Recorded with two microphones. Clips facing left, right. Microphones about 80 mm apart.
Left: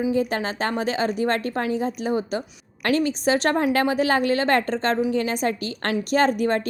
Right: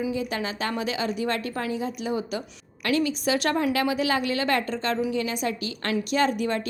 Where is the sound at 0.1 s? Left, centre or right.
Left.